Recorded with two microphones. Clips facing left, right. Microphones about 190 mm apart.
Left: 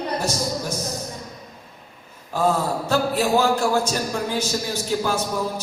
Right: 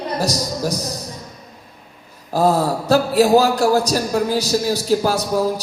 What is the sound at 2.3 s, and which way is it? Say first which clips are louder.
A man's voice: right 5 dB; 35° right (ahead or behind).